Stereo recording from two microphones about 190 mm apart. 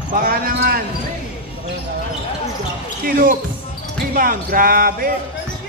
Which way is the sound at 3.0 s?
50° right (ahead or behind).